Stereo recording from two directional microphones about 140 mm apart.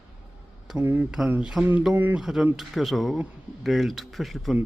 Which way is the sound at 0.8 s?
15° right (ahead or behind).